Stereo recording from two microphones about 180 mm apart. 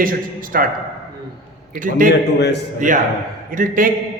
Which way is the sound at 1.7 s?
50° right (ahead or behind).